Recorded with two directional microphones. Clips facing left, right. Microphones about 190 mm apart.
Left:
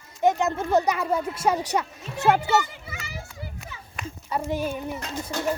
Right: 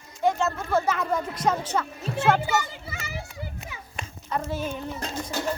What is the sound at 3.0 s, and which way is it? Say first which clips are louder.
Children playing: right 3 dB; 20° right (ahead or behind).